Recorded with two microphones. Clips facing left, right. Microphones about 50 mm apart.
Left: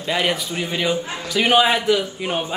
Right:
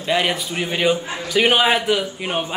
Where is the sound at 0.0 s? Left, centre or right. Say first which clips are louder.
Right 1 dB; centre.